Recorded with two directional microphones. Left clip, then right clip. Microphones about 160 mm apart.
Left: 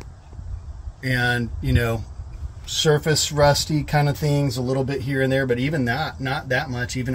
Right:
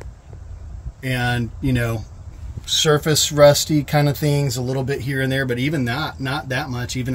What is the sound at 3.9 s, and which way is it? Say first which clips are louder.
Speech: right 2 dB; 45° right (ahead or behind).